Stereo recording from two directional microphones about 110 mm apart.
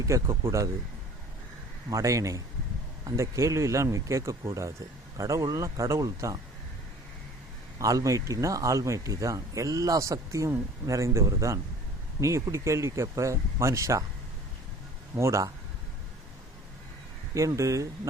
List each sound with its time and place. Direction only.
0.0 s speech: 25° right (ahead or behind)
1.9 s a man's voice: 30° right (ahead or behind)
7.8 s speech: 30° right (ahead or behind)
15.1 s speech: 25° right (ahead or behind)
17.3 s speech: 30° right (ahead or behind)